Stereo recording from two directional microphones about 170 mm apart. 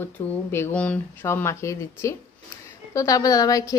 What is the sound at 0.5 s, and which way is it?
A woman's voice, 10° left (ahead or behind).